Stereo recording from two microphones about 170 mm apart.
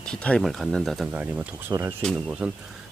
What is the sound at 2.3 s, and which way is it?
Speech, 5° right (ahead or behind).